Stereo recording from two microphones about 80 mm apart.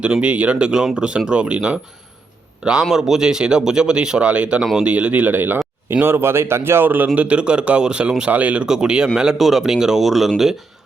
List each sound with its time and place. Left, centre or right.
0.0 s speech: centre
2.9 s speech: centre